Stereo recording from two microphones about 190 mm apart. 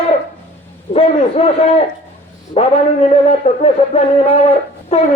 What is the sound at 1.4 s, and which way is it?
Speech, 35° left (ahead or behind).